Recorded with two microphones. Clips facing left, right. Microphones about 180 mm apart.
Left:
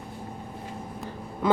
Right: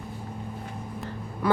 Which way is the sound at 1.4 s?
20° left (ahead or behind).